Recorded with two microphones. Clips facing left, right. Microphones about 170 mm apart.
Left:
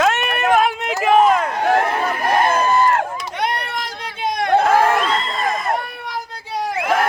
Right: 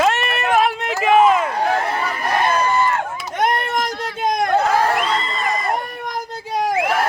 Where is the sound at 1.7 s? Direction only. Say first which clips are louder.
Left 3 dB; 50° left (ahead or behind).